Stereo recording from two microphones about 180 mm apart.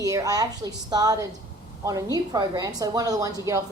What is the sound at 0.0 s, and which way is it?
A woman's voice, 20° right (ahead or behind).